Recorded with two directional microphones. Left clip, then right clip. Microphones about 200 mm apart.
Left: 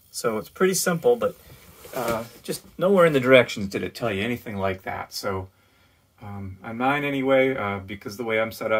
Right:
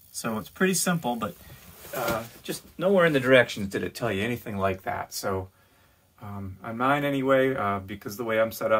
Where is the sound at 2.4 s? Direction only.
25° left (ahead or behind).